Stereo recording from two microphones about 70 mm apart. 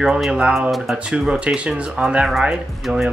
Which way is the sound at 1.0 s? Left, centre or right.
Centre.